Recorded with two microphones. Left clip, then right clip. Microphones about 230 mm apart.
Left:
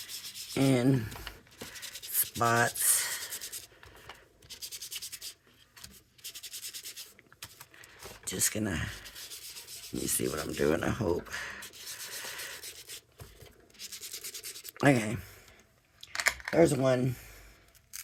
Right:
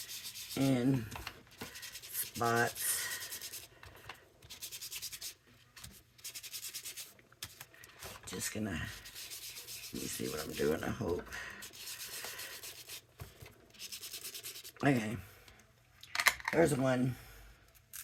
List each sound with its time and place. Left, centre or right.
0.5 s speech: left
2.4 s rub: left
8.2 s speech: left
9.9 s speech: left
14.7 s speech: left
16.1 s typing: centre
16.6 s speech: left